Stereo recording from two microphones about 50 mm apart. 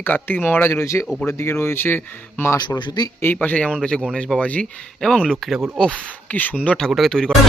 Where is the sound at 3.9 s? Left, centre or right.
Centre.